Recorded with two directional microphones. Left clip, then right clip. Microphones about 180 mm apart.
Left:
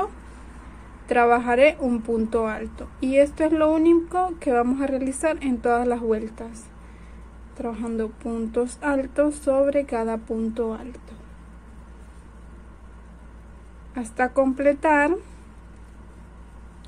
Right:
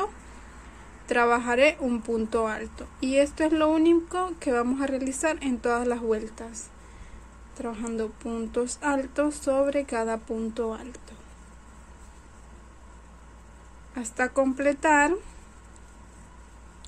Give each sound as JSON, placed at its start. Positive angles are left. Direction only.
{"t": 1.0, "sound": "a woman's voice", "side_deg": -5}
{"t": 13.9, "sound": "a woman's voice", "side_deg": -5}